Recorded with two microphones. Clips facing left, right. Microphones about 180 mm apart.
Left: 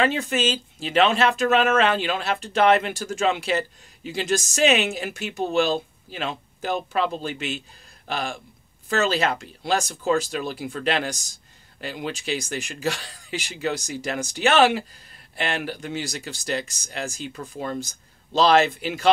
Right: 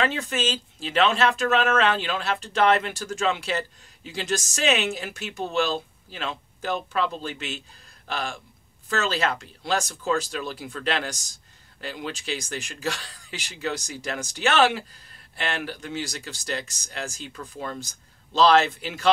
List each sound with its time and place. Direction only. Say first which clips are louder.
0.3 s speech: left 3 dB; 15° left (ahead or behind)
17.3 s speech: left 4 dB; 25° left (ahead or behind)